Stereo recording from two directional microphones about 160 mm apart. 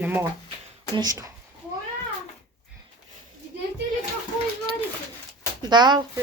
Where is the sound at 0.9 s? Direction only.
25° right (ahead or behind).